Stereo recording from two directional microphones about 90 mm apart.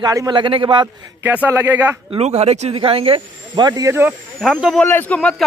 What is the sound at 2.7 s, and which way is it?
Speech, 90° right.